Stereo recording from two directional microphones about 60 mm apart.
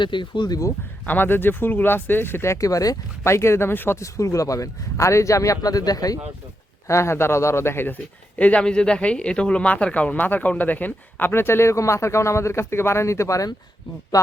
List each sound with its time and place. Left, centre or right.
1.0 s speech: left
2.6 s speech: left
3.2 s a man's voice: left
4.0 s speech: left
6.8 s a man's voice: left
7.9 s speech: left